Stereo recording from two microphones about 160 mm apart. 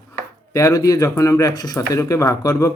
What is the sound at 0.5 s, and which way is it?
Speech, 20° left (ahead or behind).